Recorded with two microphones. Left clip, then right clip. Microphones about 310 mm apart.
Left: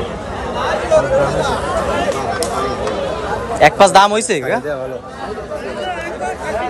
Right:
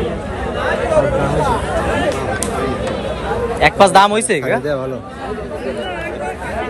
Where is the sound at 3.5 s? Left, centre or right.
Centre.